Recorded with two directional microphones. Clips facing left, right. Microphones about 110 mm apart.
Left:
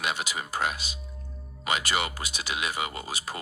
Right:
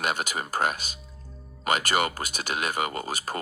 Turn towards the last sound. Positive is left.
turn(degrees=-50)  # may be behind; listen again after turning